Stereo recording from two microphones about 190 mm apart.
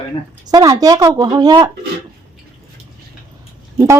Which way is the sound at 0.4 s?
20° right (ahead or behind).